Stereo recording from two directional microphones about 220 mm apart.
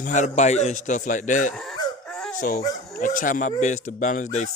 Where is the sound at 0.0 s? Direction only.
35° left (ahead or behind).